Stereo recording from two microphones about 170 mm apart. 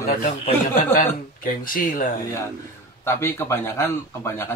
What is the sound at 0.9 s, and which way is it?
Speech, 55° left (ahead or behind).